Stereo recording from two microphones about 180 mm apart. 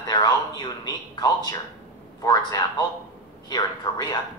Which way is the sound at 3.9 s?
20° left (ahead or behind).